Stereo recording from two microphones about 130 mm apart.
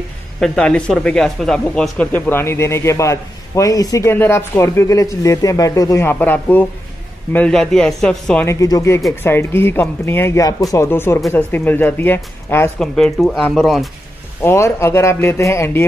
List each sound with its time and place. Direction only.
0.4 s speech: 5° left (ahead or behind)
8.5 s speech: 25° left (ahead or behind)
12.7 s speech: 5° left (ahead or behind)
14.4 s speech: 20° left (ahead or behind)